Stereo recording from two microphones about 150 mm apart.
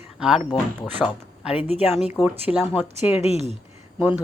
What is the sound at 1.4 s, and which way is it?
Speech, 10° right (ahead or behind).